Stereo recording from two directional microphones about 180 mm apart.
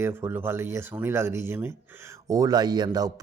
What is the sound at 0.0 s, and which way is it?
Speech, 10° right (ahead or behind).